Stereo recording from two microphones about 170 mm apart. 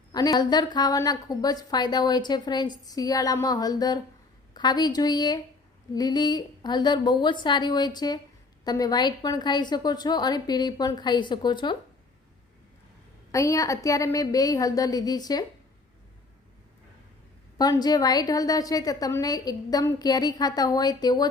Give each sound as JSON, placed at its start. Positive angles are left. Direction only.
{"t": 0.1, "sound": "a woman's voice", "side_deg": 20}
{"t": 13.3, "sound": "a woman's voice", "side_deg": 20}
{"t": 17.6, "sound": "a woman's voice", "side_deg": 25}